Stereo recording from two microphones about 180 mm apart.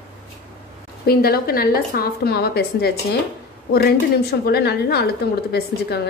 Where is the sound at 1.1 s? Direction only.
60° left (ahead or behind).